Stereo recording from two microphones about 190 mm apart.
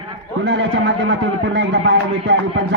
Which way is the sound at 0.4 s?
70° right (ahead or behind).